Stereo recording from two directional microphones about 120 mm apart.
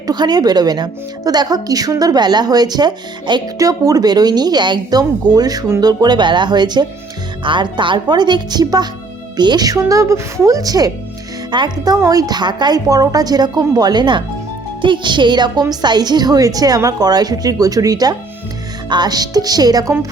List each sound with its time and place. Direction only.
0.1 s speech: 35° right (ahead or behind)